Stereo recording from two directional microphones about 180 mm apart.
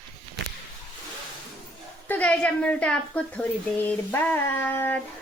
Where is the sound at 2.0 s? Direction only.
10° left (ahead or behind).